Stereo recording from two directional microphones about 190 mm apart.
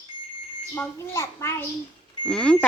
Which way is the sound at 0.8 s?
15° left (ahead or behind).